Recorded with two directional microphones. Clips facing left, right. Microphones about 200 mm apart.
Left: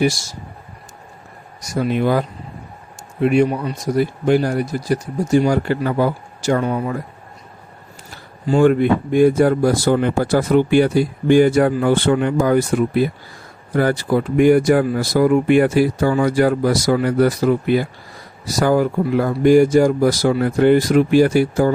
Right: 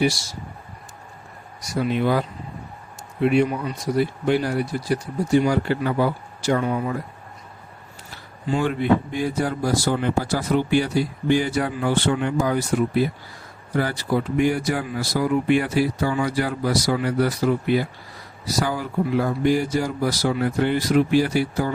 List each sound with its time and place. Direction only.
1.6 s speech: 45° left (ahead or behind)
3.2 s speech: 45° left (ahead or behind)
8.4 s speech: 50° left (ahead or behind)